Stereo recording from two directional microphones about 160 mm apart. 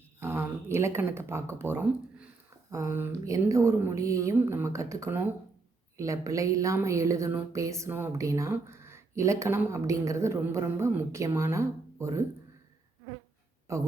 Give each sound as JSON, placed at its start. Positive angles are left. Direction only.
{"t": 0.2, "sound": "a woman's voice", "side_deg": -15}
{"t": 13.7, "sound": "speech", "side_deg": -20}